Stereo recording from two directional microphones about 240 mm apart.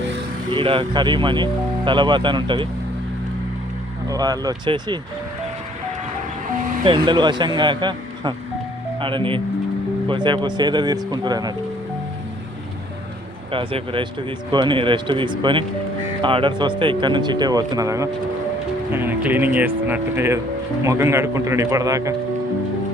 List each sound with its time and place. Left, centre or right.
0.5 s speech: centre
4.1 s speech: centre
6.8 s speech: right
13.5 s speech: right